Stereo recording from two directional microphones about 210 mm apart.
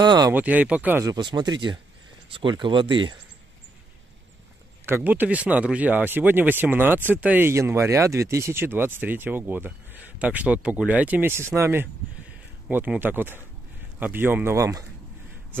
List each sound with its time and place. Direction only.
0.0 s speech: 20° right (ahead or behind)
0.3 s speech: 5° right (ahead or behind)
1.1 s speech: 20° right (ahead or behind)
4.8 s speech: 10° right (ahead or behind)